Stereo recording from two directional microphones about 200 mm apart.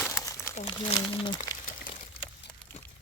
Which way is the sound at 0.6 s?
20° left (ahead or behind).